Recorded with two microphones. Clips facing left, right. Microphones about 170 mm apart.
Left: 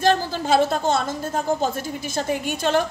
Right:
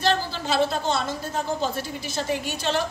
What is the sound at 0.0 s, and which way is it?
A woman's voice, 50° left (ahead or behind).